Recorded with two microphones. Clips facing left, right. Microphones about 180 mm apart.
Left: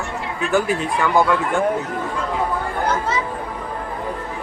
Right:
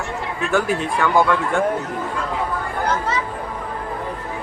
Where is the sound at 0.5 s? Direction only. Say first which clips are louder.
Left 1 dB; centre (ahead or behind).